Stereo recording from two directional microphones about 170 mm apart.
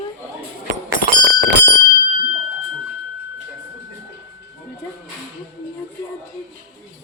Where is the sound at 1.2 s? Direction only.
70° right (ahead or behind).